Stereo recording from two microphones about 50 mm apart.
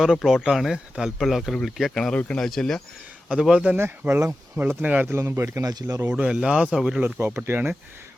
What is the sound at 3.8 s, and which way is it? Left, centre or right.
Speech, right.